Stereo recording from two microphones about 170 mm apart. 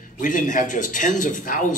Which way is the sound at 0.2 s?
50° left (ahead or behind).